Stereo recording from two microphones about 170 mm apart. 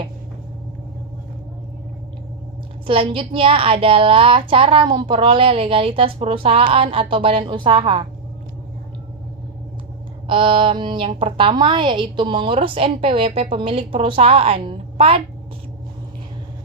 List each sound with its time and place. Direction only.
2.8 s a woman's voice: 30° right (ahead or behind)
10.2 s a woman's voice: 30° right (ahead or behind)